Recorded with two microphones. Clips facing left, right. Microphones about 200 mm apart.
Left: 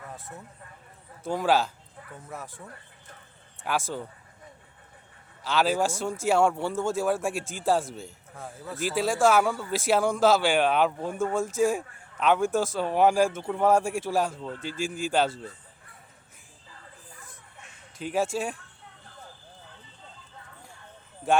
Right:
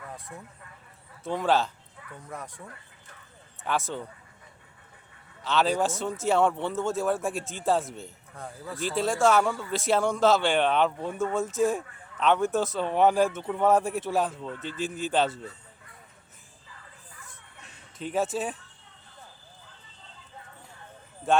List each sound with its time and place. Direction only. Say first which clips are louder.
1.2 s speech: left 1 dB; centre (ahead or behind)
3.7 s speech: even; centre (ahead or behind)
5.4 s speech: even; 5° left (ahead or behind)
18.0 s speech: left 1 dB; centre (ahead or behind)